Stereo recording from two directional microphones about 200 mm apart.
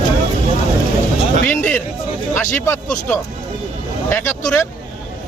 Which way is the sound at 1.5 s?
10° left (ahead or behind).